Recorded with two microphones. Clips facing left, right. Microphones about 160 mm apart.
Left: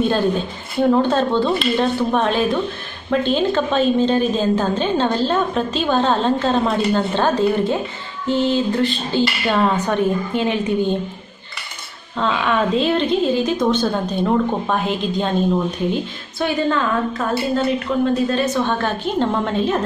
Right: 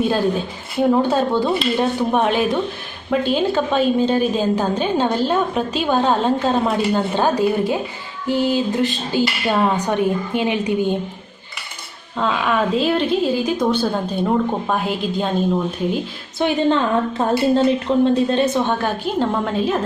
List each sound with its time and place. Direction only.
0.0 s a woman's voice: 5° right (ahead or behind)
12.2 s a woman's voice: 5° right (ahead or behind)
16.3 s a woman's voice: 20° right (ahead or behind)
18.7 s a woman's voice: 10° right (ahead or behind)